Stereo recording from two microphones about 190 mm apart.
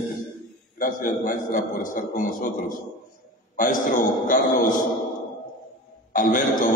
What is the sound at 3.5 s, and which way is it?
A man's voice, 45° left (ahead or behind).